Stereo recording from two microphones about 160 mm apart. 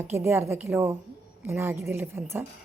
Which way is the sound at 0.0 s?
15° right (ahead or behind).